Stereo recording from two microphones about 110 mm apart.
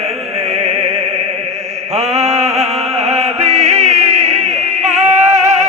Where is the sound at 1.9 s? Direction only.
70° right (ahead or behind).